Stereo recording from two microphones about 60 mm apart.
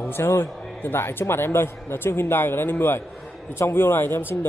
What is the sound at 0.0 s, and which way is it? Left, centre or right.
Speech, left.